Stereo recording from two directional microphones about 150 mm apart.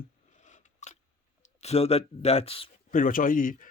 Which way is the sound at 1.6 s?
45° left (ahead or behind).